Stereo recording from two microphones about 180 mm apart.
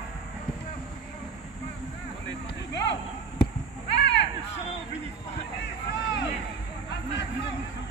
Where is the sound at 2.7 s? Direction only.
70° left (ahead or behind).